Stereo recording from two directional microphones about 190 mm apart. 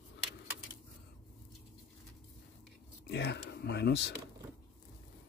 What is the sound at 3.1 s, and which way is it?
Speech, 65° left (ahead or behind).